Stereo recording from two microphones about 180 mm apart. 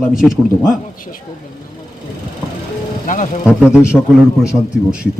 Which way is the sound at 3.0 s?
45° left (ahead or behind).